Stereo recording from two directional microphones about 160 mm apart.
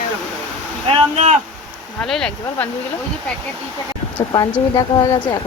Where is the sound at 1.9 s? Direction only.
5° left (ahead or behind).